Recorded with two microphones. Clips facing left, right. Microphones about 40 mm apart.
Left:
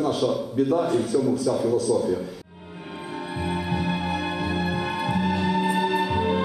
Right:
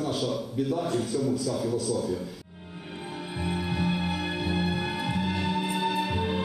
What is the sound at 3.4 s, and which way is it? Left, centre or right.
Music, centre.